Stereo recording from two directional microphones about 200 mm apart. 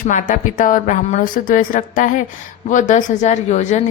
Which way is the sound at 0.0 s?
40° left (ahead or behind).